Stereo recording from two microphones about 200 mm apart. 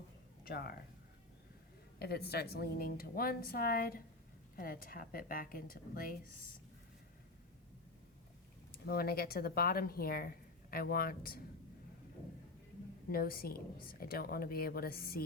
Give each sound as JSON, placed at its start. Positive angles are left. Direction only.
{"t": 0.4, "sound": "speech", "side_deg": 50}
{"t": 2.0, "sound": "speech", "side_deg": 50}
{"t": 8.9, "sound": "speech", "side_deg": 50}
{"t": 13.1, "sound": "speech", "side_deg": 50}